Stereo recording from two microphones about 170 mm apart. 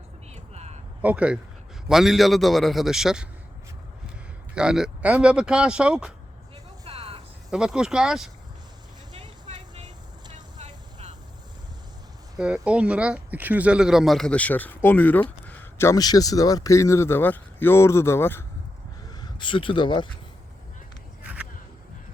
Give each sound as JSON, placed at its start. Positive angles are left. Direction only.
{"t": 0.3, "sound": "a sound", "side_deg": -40}
{"t": 1.0, "sound": "speech", "side_deg": -10}
{"t": 4.5, "sound": "speech", "side_deg": -5}
{"t": 6.8, "sound": "music", "side_deg": -35}
{"t": 7.5, "sound": "speech", "side_deg": -5}
{"t": 9.2, "sound": "vehicle", "side_deg": -25}
{"t": 10.3, "sound": "vehicle", "side_deg": -45}
{"t": 12.4, "sound": "speech", "side_deg": -5}
{"t": 19.0, "sound": "speech", "side_deg": 25}